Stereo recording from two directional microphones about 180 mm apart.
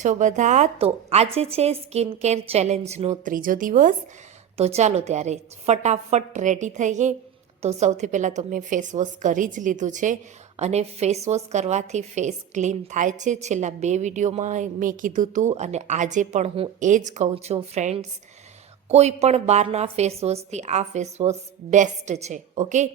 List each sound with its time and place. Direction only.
0.0 s a woman's voice: 45° right (ahead or behind)
4.5 s a woman's voice: 35° right (ahead or behind)